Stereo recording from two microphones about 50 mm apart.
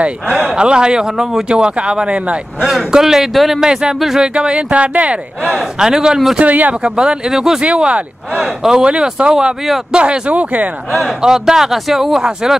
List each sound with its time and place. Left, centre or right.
0.0 s speech: right
1.5 s speech: centre
2.6 s speech: centre
3.6 s speech: centre
5.6 s speech: centre
6.3 s speech: right
6.7 s speech: centre
7.6 s speech: right
11.0 s speech: centre